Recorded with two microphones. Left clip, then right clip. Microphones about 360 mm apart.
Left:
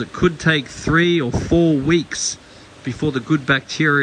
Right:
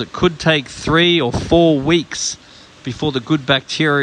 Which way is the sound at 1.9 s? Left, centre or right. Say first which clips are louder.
Right 2 dB; centre.